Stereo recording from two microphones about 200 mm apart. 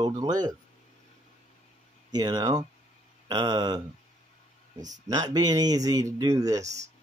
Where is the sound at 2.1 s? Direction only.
20° right (ahead or behind).